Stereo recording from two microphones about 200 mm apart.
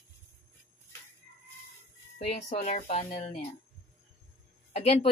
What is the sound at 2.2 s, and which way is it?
Speech, 35° left (ahead or behind).